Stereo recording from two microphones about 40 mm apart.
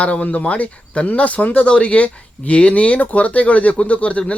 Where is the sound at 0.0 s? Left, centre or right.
Left.